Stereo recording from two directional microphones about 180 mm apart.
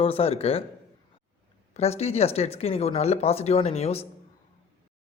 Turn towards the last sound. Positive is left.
turn(degrees=35)  # may be behind; listen again after turning